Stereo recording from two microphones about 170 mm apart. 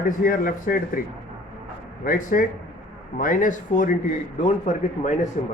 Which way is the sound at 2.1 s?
55° left (ahead or behind).